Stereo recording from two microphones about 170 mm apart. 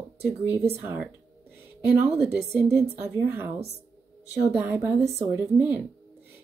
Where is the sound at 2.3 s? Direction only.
75° right (ahead or behind).